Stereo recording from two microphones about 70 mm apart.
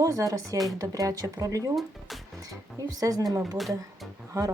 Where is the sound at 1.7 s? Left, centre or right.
Centre.